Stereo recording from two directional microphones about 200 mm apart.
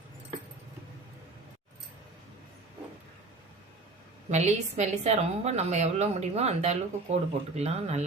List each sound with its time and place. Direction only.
4.3 s a woman's voice: 35° right (ahead or behind)